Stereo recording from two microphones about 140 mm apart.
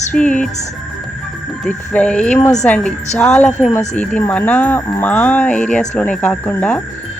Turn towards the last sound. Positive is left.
turn(degrees=10)  # may be behind; listen again after turning